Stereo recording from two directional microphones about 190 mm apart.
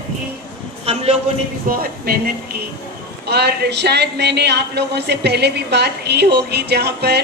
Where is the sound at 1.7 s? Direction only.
50° right (ahead or behind).